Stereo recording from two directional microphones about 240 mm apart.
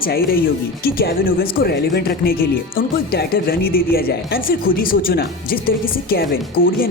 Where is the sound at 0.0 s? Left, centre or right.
Left.